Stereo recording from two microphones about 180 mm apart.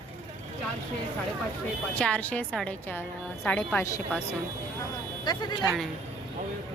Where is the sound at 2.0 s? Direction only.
5° left (ahead or behind).